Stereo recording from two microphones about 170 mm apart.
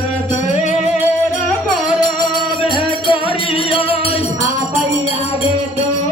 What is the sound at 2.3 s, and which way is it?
Music, 30° left (ahead or behind).